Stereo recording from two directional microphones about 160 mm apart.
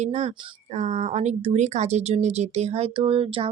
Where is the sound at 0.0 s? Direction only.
45° right (ahead or behind).